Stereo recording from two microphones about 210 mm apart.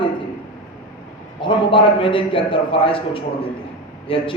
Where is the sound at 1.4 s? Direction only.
25° left (ahead or behind).